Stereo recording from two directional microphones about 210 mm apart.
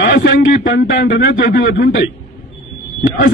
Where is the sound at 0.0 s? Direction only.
60° left (ahead or behind).